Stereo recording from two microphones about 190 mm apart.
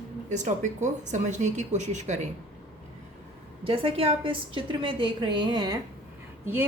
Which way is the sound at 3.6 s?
30° right (ahead or behind).